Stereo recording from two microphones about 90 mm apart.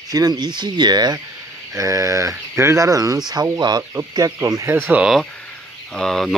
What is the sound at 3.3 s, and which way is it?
Speech, 50° right (ahead or behind).